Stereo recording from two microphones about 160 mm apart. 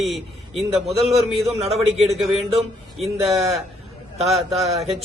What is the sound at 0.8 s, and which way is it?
Speech, 40° right (ahead or behind).